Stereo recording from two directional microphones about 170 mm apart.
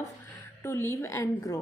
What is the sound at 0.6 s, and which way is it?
Speech, 15° left (ahead or behind).